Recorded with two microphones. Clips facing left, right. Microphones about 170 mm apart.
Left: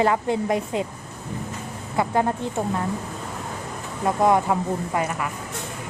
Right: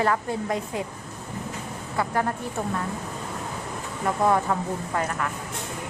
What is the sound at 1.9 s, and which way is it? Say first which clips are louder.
Speech: left 4 dB; 20° left (ahead or behind).